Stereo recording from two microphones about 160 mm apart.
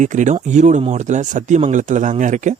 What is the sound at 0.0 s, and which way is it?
Speech, 50° right (ahead or behind).